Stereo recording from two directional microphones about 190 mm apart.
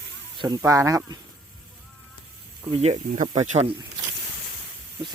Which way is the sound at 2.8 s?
35° right (ahead or behind).